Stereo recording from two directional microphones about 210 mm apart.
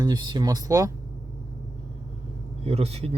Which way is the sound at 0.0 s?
20° right (ahead or behind).